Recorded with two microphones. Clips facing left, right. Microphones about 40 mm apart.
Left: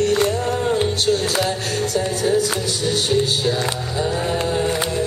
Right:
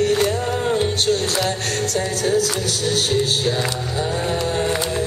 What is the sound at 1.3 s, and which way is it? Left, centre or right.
Music, centre.